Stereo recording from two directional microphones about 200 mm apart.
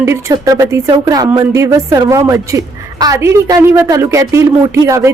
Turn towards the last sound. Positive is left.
turn(degrees=-15)  # may be behind; listen again after turning